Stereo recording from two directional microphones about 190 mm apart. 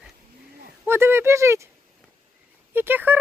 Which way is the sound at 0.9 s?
10° right (ahead or behind).